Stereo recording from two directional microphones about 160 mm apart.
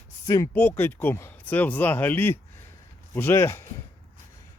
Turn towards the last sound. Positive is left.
turn(degrees=15)  # may be behind; listen again after turning